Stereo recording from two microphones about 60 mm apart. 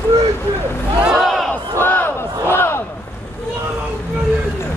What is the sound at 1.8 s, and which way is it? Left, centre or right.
Battle cry, left.